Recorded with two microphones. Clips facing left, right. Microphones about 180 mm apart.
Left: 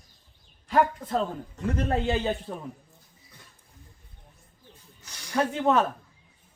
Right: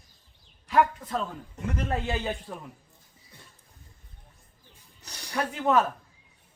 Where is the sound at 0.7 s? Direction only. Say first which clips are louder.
Left 1 dB; 35° left (ahead or behind).